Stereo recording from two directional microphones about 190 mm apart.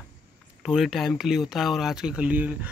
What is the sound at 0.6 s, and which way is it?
Speech, centre (ahead or behind).